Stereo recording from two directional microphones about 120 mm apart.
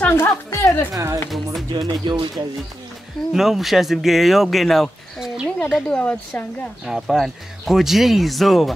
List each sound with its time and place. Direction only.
0.0 s speech: 20° left (ahead or behind)
0.9 s speech: 30° right (ahead or behind)
3.3 s speech: centre (ahead or behind)
5.9 s speech: 10° left (ahead or behind)
6.9 s speech: centre (ahead or behind)